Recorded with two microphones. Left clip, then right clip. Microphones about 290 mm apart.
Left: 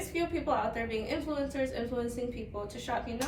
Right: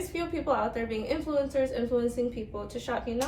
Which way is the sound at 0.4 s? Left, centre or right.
Centre.